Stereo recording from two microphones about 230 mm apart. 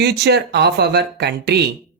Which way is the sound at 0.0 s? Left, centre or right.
Right.